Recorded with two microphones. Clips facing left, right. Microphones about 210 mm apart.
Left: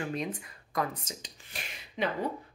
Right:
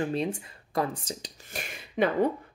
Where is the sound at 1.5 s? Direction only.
55° right (ahead or behind).